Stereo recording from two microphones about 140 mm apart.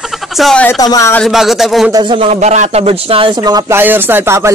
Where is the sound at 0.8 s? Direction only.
25° left (ahead or behind).